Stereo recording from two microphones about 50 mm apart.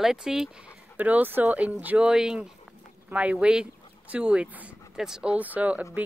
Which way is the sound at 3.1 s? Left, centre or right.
Right.